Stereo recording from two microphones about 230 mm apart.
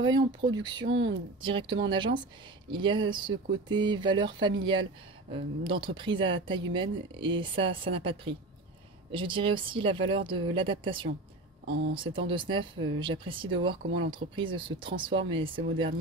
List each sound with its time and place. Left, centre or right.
0.0 s speech: centre
0.8 s speech: right
1.4 s speech: right
11.6 s speech: right
11.9 s speech: right
13.8 s speech: right
14.1 s speech: right